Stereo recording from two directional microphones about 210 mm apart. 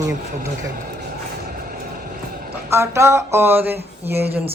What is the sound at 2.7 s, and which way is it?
Speech, 15° right (ahead or behind).